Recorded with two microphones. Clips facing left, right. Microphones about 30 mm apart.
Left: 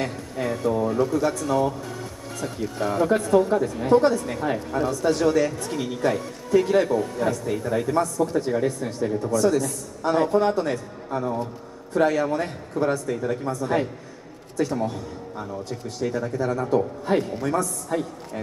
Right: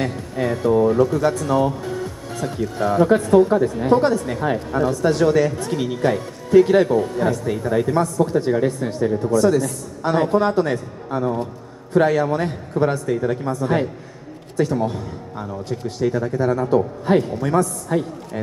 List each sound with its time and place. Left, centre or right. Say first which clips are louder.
0.0 s a man's voice: right 4 dB; right
16.0 s a woman's voice: right 5 dB; centre